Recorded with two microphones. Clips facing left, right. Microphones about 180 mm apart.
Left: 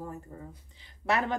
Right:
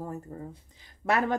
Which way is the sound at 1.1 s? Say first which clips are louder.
Right 2 dB; 45° right (ahead or behind).